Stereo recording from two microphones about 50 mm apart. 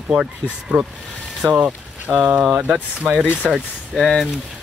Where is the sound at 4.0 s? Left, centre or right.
Centre.